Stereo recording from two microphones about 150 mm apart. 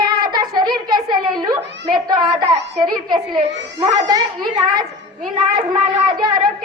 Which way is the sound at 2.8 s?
30° right (ahead or behind).